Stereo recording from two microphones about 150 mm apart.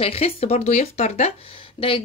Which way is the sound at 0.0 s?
40° left (ahead or behind).